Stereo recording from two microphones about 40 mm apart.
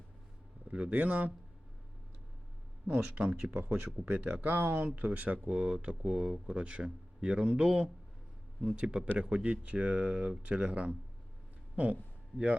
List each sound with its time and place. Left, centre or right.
0.7 s speech: right
2.8 s speech: right
4.9 s speech: right
5.5 s speech: right